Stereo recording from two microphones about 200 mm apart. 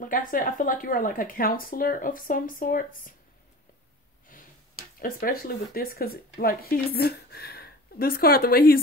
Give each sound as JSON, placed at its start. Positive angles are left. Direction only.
{"t": 0.0, "sound": "speech", "side_deg": 40}
{"t": 4.3, "sound": "finger snapping", "side_deg": 45}
{"t": 5.0, "sound": "speech", "side_deg": 45}